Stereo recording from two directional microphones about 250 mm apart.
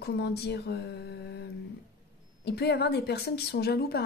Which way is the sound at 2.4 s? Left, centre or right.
Left.